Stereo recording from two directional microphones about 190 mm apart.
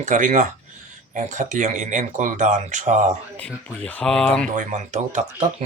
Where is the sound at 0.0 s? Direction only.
40° right (ahead or behind).